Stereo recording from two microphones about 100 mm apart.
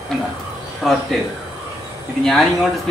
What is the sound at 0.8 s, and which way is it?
Speech, centre (ahead or behind).